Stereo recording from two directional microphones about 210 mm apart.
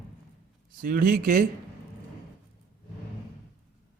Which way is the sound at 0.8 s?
40° right (ahead or behind).